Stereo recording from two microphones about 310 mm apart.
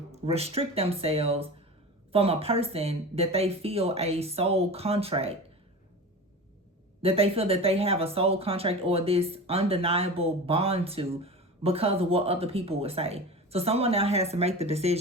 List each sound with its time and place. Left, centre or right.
0.3 s speech: centre
7.0 s speech: centre